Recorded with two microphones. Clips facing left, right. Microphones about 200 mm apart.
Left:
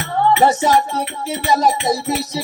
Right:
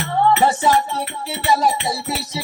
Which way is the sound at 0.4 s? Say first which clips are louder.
Left 2 dB; 40° left (ahead or behind).